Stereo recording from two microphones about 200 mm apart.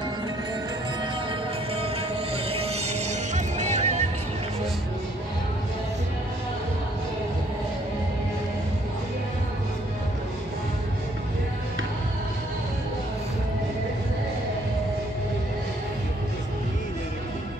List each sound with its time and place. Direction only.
2.3 s music: 30° right (ahead or behind)